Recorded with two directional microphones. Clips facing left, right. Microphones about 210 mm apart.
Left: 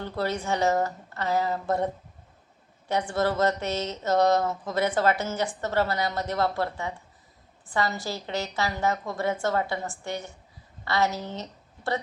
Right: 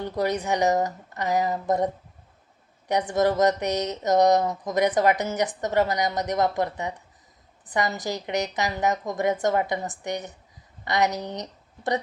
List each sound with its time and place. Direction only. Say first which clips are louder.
0.0 s speech: right 3 dB; 15° right (ahead or behind)
3.1 s speech: right 4 dB; 15° right (ahead or behind)